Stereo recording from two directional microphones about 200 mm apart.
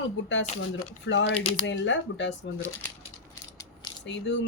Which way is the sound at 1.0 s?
60° left (ahead or behind).